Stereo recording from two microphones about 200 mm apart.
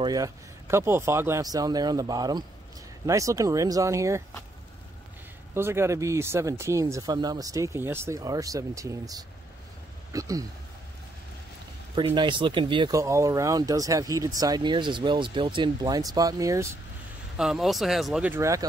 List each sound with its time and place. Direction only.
0.0 s speech: 20° right (ahead or behind)
5.5 s speech: 10° right (ahead or behind)
11.9 s speech: 25° right (ahead or behind)
17.4 s speech: centre (ahead or behind)